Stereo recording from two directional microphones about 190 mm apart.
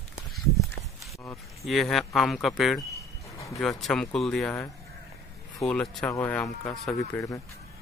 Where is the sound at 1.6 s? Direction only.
Centre (ahead or behind).